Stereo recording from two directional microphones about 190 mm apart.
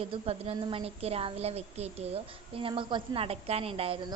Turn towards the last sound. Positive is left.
turn(degrees=-30)  # may be behind; listen again after turning